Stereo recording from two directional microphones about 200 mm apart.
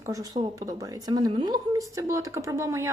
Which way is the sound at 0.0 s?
15° right (ahead or behind).